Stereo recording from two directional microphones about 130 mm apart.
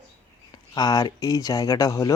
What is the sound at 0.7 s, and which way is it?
Speech, 30° left (ahead or behind).